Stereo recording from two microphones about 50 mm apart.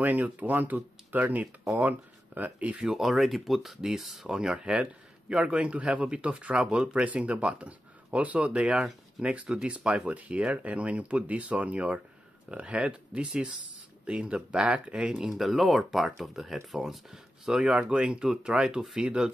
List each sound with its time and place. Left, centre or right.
0.0 s speech: right
3.0 s speech: centre; by 9.5 s right
9.5 s speech: centre
10.0 s speech: right
13.3 s speech: centre
15.2 s speech: centre
17.6 s speech: right